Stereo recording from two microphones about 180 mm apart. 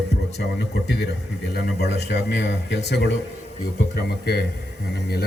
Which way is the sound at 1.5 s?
65° left (ahead or behind).